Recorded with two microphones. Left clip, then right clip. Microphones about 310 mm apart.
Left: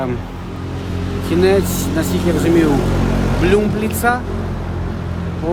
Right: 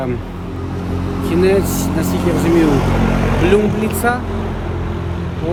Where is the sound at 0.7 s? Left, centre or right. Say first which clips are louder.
Right 2 dB; centre.